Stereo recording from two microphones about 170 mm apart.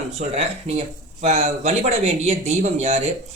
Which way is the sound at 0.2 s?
40° right (ahead or behind).